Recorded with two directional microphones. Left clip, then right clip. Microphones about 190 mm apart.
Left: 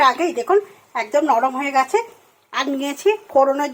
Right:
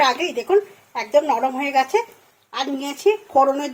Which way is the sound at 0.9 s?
55° left (ahead or behind).